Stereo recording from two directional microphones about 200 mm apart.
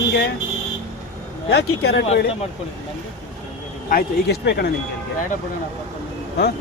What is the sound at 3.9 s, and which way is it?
Speech, 50° left (ahead or behind).